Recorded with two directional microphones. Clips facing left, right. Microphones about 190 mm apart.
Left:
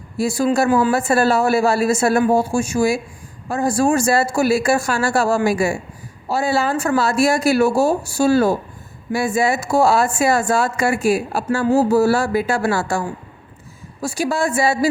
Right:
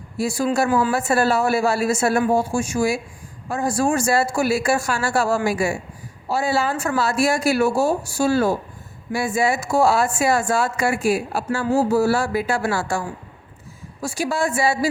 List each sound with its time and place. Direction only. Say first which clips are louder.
0.2 s speech: left 3 dB; 35° left (ahead or behind)